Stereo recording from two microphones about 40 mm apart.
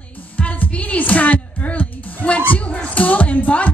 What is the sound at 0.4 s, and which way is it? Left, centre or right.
Music, left.